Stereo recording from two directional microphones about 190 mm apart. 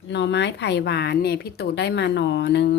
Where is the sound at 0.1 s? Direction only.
65° left (ahead or behind).